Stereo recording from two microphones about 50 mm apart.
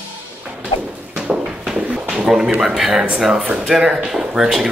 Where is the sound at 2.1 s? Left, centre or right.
Centre.